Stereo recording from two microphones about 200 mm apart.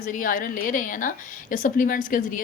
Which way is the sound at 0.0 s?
45° left (ahead or behind).